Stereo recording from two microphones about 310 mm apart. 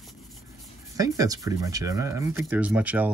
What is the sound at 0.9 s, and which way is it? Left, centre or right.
Speech, centre.